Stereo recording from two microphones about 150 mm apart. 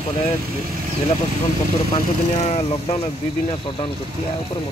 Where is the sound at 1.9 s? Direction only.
40° left (ahead or behind).